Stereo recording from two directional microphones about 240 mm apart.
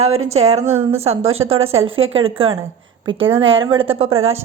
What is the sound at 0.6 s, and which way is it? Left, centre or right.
Speech, right.